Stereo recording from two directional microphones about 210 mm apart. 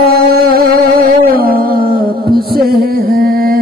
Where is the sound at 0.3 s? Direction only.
45° right (ahead or behind).